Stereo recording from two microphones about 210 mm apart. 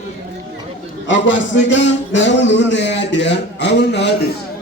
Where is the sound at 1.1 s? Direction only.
60° left (ahead or behind).